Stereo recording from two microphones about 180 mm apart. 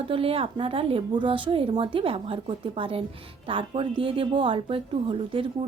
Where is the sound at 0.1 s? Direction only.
30° right (ahead or behind).